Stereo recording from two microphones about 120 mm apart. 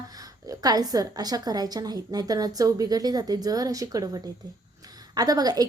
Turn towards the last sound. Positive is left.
turn(degrees=-30)  # may be behind; listen again after turning